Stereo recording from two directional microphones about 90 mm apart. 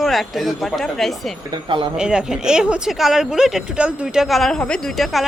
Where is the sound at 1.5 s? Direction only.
65° right (ahead or behind).